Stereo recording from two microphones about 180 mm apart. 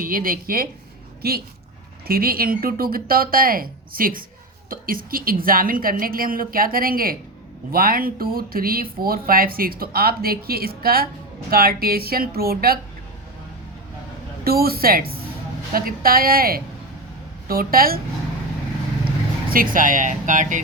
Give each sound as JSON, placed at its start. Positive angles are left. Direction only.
{"t": 0.0, "sound": "a woman's voice", "side_deg": -50}
{"t": 14.4, "sound": "a woman's voice", "side_deg": -55}
{"t": 19.5, "sound": "a woman's voice", "side_deg": -50}